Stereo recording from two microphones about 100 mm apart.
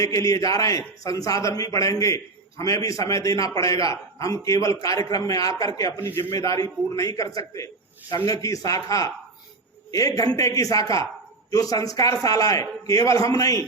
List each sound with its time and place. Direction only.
0.0 s a man's voice: 35° left (ahead or behind)